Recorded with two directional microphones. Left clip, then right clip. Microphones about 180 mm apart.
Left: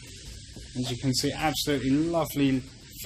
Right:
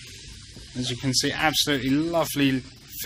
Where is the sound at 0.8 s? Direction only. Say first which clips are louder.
Right 4 dB; 5° right (ahead or behind).